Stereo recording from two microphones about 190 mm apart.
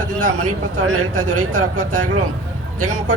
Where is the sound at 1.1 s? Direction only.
45° right (ahead or behind).